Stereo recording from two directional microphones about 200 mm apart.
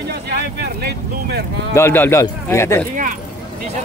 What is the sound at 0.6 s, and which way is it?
Speech, 55° right (ahead or behind).